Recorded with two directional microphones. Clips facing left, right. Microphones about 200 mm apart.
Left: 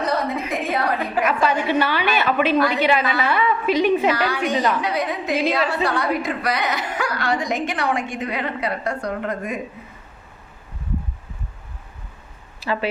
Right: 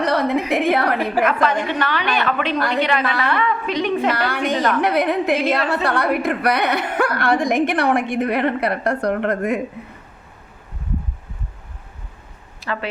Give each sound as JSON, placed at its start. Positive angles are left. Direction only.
{"t": 0.0, "sound": "a woman's voice", "side_deg": -65}
{"t": 1.2, "sound": "a woman's voice", "side_deg": 10}
{"t": 4.8, "sound": "a woman's voice", "side_deg": -60}
{"t": 12.6, "sound": "a woman's voice", "side_deg": 10}